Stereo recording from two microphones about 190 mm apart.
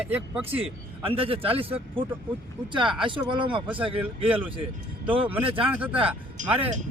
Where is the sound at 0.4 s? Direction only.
30° right (ahead or behind).